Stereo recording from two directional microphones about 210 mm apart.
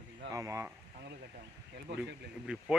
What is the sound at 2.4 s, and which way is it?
Speech, 5° right (ahead or behind).